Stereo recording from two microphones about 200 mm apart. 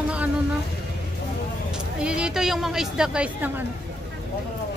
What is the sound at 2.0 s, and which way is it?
A woman's voice, 5° right (ahead or behind).